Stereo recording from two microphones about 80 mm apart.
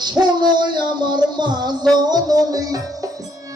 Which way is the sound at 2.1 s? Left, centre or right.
Right.